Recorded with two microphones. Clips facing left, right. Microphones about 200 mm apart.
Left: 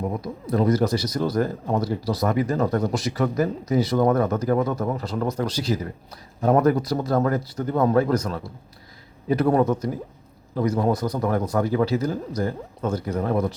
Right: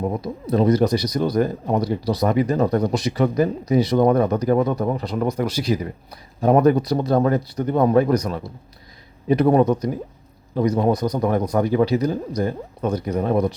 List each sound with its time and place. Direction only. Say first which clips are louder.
0.0 s a man's voice: right 3 dB; 25° right (ahead or behind)